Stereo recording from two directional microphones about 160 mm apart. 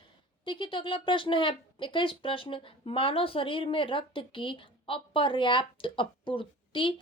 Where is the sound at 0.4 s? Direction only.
30° left (ahead or behind).